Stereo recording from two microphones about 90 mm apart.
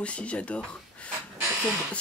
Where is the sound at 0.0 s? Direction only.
15° left (ahead or behind).